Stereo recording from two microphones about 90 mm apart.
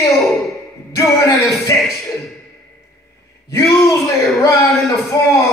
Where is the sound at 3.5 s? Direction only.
30° left (ahead or behind).